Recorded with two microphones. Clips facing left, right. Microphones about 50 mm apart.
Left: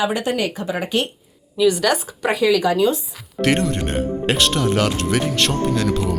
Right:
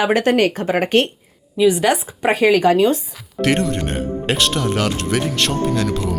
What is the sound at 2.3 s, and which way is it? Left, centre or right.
Speech, right.